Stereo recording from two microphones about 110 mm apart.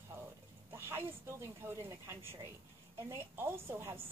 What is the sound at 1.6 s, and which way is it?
A woman's voice, 20° right (ahead or behind).